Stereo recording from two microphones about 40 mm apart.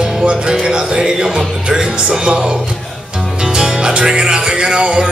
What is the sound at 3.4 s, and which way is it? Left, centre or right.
Music, centre.